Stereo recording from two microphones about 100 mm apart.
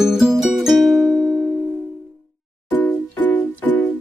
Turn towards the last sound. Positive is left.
turn(degrees=20)  # may be behind; listen again after turning